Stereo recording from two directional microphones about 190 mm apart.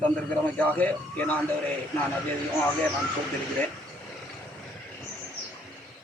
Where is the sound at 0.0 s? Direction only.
5° left (ahead or behind).